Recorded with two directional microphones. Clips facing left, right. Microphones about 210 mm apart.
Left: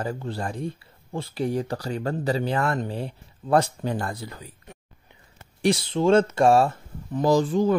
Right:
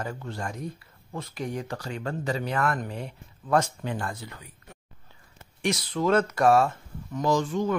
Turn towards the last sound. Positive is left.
turn(degrees=35)  # may be behind; listen again after turning